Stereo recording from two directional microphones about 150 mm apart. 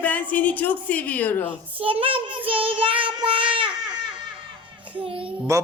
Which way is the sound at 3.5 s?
30° right (ahead or behind).